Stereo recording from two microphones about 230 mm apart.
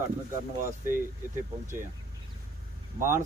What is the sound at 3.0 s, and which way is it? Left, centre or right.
Speech, right.